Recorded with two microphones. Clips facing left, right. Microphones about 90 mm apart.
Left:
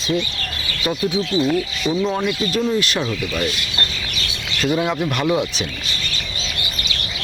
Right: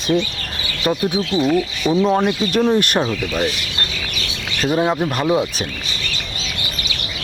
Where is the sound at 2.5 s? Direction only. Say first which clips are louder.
Right 4 dB; 55° right (ahead or behind).